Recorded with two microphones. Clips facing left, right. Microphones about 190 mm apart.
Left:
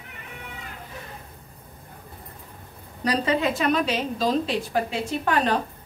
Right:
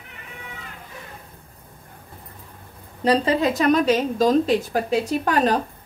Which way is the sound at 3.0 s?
30° right (ahead or behind).